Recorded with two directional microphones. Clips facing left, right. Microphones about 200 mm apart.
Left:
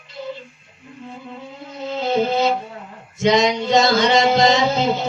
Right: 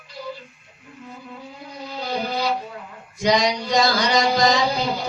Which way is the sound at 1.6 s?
25° left (ahead or behind).